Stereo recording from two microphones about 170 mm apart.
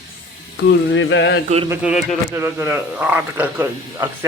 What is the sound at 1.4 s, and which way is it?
Speech, 35° right (ahead or behind).